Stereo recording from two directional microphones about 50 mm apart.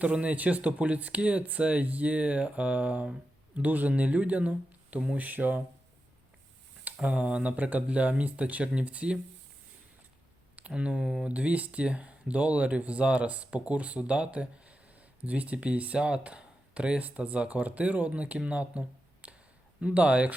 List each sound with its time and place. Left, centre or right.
0.0 s speech: right
7.0 s speech: right
10.7 s speech: right
11.0 s speech: centre
11.3 s speech: right
19.2 s a sound: right
19.8 s speech: right